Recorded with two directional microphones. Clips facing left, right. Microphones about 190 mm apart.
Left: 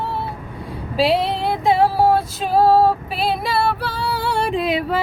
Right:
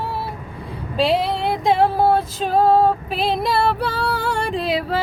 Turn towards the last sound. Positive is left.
turn(degrees=-35)  # may be behind; listen again after turning